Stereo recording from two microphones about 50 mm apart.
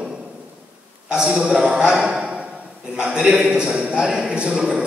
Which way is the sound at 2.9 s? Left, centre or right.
Centre.